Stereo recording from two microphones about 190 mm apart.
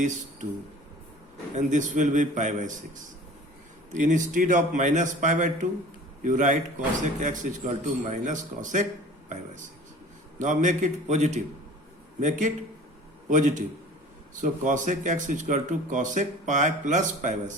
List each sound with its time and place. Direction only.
0.0 s speech: 40° right (ahead or behind)
1.5 s speech: 40° right (ahead or behind)
4.0 s speech: 40° right (ahead or behind)
10.3 s speech: 40° right (ahead or behind)
13.3 s speech: 40° right (ahead or behind)